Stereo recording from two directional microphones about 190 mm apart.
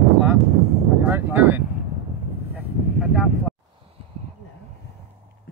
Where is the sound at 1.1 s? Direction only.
10° right (ahead or behind).